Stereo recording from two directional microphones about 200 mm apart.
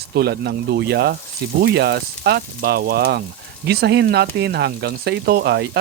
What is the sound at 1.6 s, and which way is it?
Speech, 55° right (ahead or behind).